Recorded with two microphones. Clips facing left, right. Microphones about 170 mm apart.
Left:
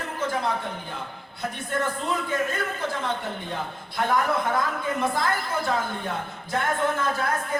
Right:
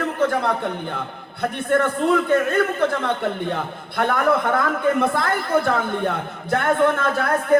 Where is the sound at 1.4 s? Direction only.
60° right (ahead or behind).